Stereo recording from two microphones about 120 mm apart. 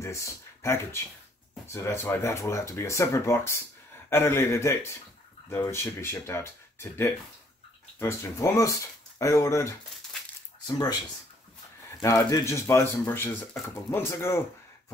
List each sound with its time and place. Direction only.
0.0 s speech: 25° left (ahead or behind)
12.0 s speech: 30° left (ahead or behind)